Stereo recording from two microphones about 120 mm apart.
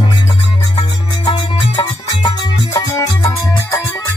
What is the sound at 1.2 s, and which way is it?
Music, 35° left (ahead or behind).